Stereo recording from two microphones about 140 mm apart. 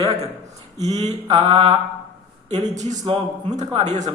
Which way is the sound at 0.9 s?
50° right (ahead or behind).